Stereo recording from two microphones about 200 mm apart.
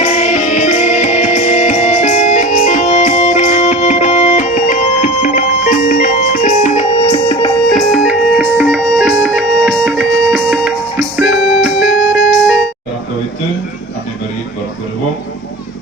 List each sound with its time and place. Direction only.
0.0 s music: 35° left (ahead or behind)
7.1 s music: 25° left (ahead or behind)
7.7 s music: centre (ahead or behind)